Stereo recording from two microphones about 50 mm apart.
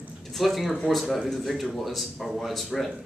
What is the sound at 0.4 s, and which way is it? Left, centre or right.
Speech, centre.